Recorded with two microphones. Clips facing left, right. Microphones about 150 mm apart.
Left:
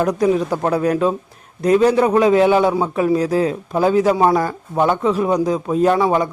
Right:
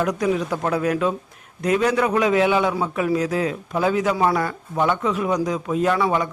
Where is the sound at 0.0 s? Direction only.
30° left (ahead or behind).